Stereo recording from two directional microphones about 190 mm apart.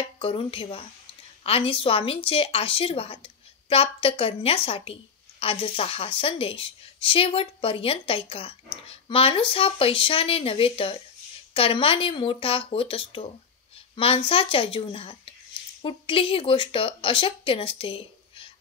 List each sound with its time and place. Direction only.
0.2 s a woman's voice: 30° left (ahead or behind)